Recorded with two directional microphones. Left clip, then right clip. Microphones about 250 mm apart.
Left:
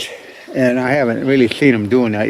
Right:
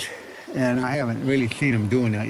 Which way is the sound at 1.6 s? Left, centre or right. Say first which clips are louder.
Left 10 dB; centre.